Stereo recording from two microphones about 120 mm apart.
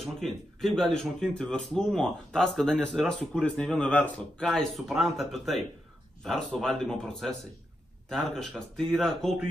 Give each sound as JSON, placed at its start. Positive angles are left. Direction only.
{"t": 0.0, "sound": "a man's voice", "side_deg": 0}